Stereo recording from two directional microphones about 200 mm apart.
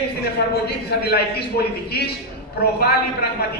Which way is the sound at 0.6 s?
55° left (ahead or behind).